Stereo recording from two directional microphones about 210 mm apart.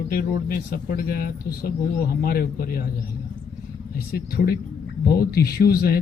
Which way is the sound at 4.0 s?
45° left (ahead or behind).